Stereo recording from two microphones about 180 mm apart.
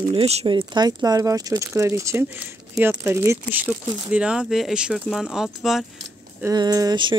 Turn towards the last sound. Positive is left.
turn(degrees=-25)  # may be behind; listen again after turning